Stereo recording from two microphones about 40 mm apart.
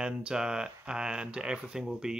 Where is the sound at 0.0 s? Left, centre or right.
Right.